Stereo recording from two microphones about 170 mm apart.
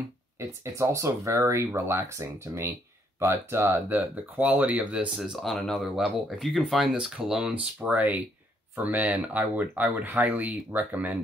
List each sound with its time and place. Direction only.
0.7 s speech: 15° right (ahead or behind)